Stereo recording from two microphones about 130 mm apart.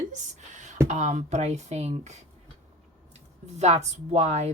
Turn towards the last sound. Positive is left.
turn(degrees=-55)  # may be behind; listen again after turning